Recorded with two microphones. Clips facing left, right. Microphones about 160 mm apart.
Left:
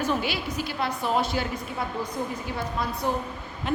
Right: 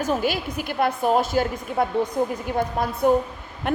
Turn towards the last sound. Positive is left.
turn(degrees=-55)  # may be behind; listen again after turning